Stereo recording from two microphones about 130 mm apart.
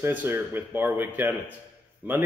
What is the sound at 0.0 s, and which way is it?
Speech, 15° right (ahead or behind).